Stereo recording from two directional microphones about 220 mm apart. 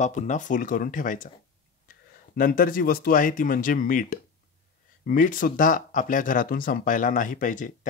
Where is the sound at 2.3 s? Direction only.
40° left (ahead or behind).